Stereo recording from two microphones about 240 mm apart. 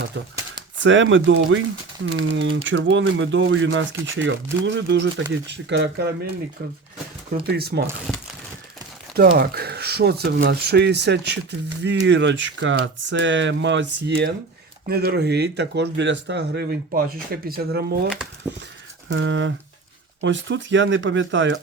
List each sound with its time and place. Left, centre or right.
0.8 s speech: right
7.4 s speech: right
8.1 s crumpling: centre
9.1 s speech: right
18.5 s speech: centre
19.0 s speech: right